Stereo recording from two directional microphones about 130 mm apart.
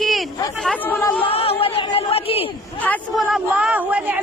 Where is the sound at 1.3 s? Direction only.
50° left (ahead or behind).